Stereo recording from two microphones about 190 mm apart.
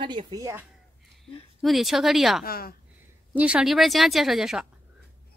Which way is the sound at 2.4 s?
50° left (ahead or behind).